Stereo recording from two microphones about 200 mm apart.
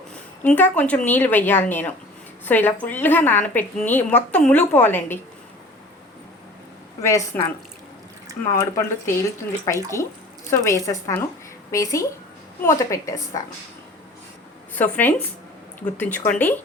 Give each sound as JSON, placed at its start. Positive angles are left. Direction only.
{"t": 0.1, "sound": "a woman's voice", "side_deg": 10}
{"t": 7.0, "sound": "a woman's voice", "side_deg": 15}
{"t": 10.5, "sound": "a woman's voice", "side_deg": 15}
{"t": 14.8, "sound": "a woman's voice", "side_deg": 10}